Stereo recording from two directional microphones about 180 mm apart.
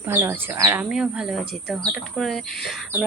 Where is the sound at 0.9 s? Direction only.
5° right (ahead or behind).